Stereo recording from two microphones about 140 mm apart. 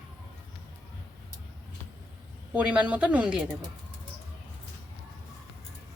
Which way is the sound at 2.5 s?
10° right (ahead or behind).